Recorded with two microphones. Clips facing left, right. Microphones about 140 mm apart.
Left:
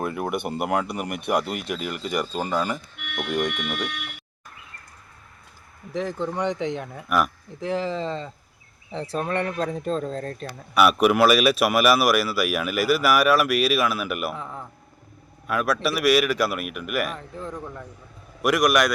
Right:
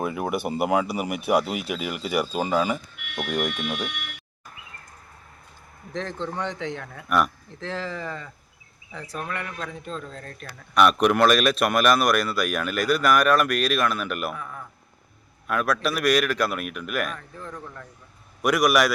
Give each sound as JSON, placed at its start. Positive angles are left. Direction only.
{"t": 0.0, "sound": "speech", "side_deg": 0}
{"t": 5.9, "sound": "speech", "side_deg": 10}
{"t": 10.8, "sound": "speech", "side_deg": 5}
{"t": 14.3, "sound": "speech", "side_deg": 25}
{"t": 15.4, "sound": "speech", "side_deg": 0}
{"t": 17.2, "sound": "speech", "side_deg": 20}
{"t": 18.4, "sound": "speech", "side_deg": 0}